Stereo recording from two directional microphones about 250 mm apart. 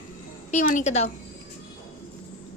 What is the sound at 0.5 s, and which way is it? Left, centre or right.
Speech, left.